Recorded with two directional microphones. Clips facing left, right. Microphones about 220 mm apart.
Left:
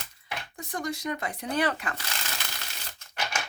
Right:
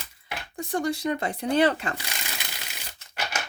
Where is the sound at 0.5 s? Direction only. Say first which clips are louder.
Right 7 dB; 30° right (ahead or behind).